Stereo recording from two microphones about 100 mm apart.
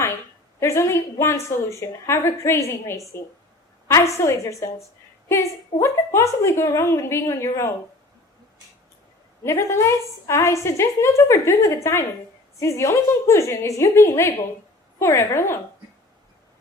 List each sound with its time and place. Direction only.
0.6 s a woman's voice: 25° left (ahead or behind)
9.4 s a woman's voice: 30° left (ahead or behind)